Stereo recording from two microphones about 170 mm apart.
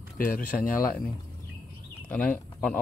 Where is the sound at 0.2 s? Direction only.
55° left (ahead or behind).